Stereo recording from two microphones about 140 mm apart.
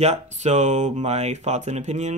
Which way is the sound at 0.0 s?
55° right (ahead or behind).